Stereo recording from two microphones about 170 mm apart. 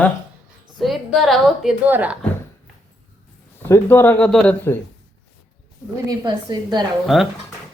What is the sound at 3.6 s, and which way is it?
Speech, 15° left (ahead or behind).